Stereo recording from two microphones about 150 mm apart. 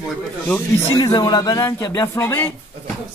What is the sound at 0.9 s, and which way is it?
Speech, 30° left (ahead or behind).